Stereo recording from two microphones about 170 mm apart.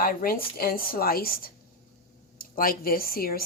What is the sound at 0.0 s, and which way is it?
Speech, 60° left (ahead or behind).